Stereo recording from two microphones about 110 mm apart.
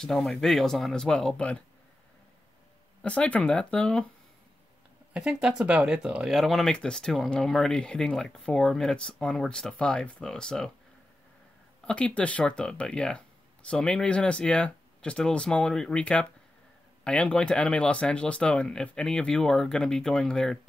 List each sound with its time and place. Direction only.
0.0 s speech: centre (ahead or behind)
3.0 s speech: 10° left (ahead or behind)
5.1 s speech: 10° right (ahead or behind)
11.8 s speech: 10° left (ahead or behind)